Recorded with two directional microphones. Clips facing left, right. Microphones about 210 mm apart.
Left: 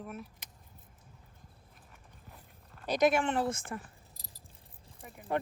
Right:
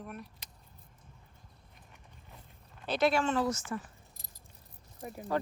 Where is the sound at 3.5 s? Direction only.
55° left (ahead or behind).